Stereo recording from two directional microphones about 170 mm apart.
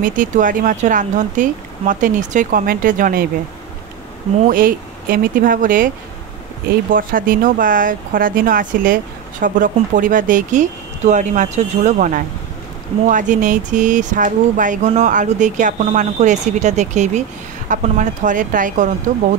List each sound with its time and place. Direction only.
0.0 s speech: 50° right (ahead or behind)
4.5 s speech: 55° right (ahead or behind)
6.9 s speech: 55° right (ahead or behind)